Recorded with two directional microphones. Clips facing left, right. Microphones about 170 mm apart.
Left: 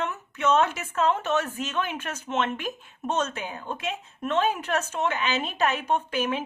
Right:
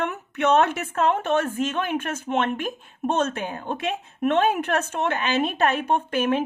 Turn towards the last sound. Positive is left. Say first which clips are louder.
# right 4 dB
turn(degrees=-55)  # may be behind; listen again after turning